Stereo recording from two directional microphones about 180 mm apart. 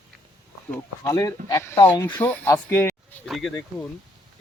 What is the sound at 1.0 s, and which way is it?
Speech, 20° left (ahead or behind).